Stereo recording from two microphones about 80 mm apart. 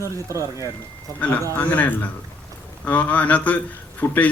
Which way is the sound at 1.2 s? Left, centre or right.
Centre.